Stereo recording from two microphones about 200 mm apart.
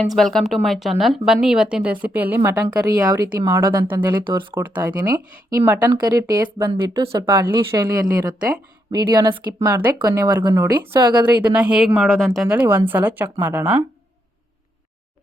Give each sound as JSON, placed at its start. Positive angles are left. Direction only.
{"t": 0.2, "sound": "speech", "side_deg": 0}
{"t": 11.4, "sound": "a woman's voice", "side_deg": -5}